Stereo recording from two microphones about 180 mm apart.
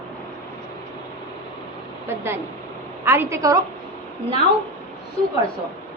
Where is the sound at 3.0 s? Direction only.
15° right (ahead or behind).